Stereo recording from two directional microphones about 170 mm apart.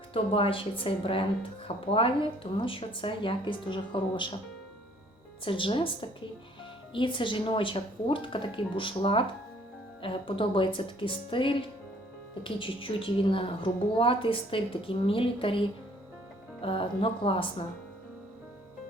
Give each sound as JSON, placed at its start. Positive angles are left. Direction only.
{"t": 0.1, "sound": "a woman's voice", "side_deg": 35}
{"t": 5.5, "sound": "a woman's voice", "side_deg": 30}